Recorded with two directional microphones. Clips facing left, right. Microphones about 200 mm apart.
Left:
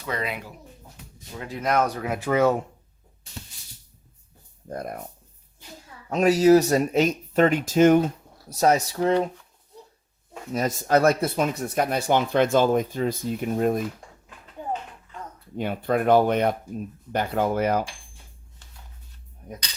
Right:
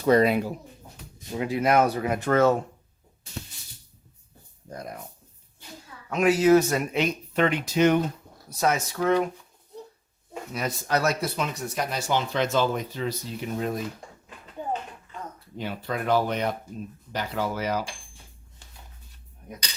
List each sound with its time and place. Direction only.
0.0 s speech: 40° right (ahead or behind)
1.4 s speech: 10° right (ahead or behind); by 2.6 s 10° left (ahead or behind)
4.7 s speech: 55° left (ahead or behind)
6.1 s speech: 35° left (ahead or behind)
10.5 s speech: 45° left (ahead or behind)
15.5 s speech: 55° left (ahead or behind)